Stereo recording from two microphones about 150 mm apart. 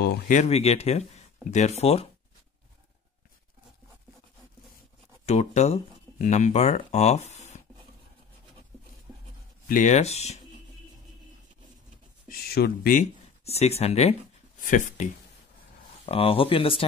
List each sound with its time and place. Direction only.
0.0 s speech: 90° left
0.4 s speech: 45° left (ahead or behind)
5.2 s speech: 45° left (ahead or behind)
9.7 s speech: 55° left (ahead or behind)
12.3 s speech: 90° left; by 13.1 s 70° left (ahead or behind)
13.4 s speech: 45° left (ahead or behind)
14.6 s speech: 60° left (ahead or behind)
16.1 s speech: 40° left (ahead or behind)